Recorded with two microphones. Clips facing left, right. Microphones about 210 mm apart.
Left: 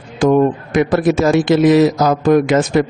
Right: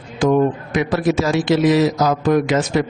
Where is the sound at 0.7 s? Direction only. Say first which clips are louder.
Left 5 dB; 50° left (ahead or behind).